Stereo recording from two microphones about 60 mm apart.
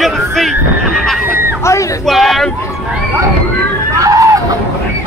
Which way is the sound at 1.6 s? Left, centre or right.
Left.